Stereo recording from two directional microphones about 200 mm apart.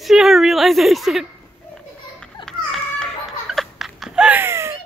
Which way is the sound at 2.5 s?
5° left (ahead or behind).